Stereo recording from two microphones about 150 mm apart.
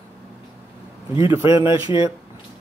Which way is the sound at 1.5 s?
35° left (ahead or behind).